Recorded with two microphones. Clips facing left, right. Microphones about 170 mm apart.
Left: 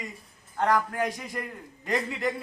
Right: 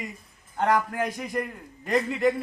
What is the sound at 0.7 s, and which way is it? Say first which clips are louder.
A man's voice: right 1 dB; centre (ahead or behind).